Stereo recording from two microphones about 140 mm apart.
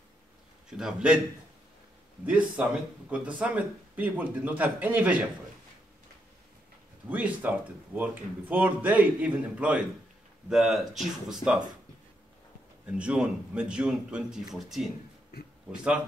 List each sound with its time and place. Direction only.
0.7 s speech: 5° right (ahead or behind)
2.2 s speech: 10° right (ahead or behind)
7.1 s speech: 10° right (ahead or behind)
12.8 s speech: 10° right (ahead or behind)
15.3 s a man's voice: 90° left
15.7 s speech: 5° right (ahead or behind)